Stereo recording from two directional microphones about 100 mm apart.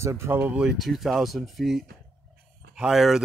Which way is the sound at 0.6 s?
5° right (ahead or behind).